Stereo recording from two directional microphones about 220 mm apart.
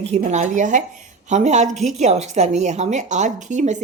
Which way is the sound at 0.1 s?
30° right (ahead or behind).